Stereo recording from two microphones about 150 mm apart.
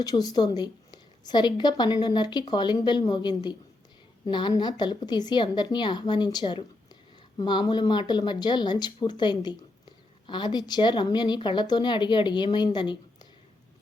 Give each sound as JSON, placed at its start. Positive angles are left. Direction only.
{"t": 0.0, "sound": "a woman's voice", "side_deg": 25}